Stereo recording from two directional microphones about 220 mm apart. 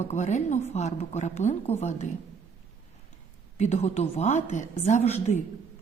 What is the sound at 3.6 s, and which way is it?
A woman's voice, 30° left (ahead or behind).